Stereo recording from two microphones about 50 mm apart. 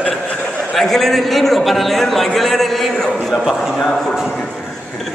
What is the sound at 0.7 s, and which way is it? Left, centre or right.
A man's voice, centre.